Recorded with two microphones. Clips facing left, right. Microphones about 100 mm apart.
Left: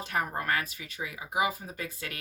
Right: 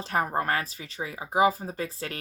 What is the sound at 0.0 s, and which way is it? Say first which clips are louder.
Speech: right 5 dB; 35° right (ahead or behind).